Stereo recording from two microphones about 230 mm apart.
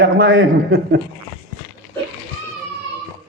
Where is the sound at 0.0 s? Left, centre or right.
Right.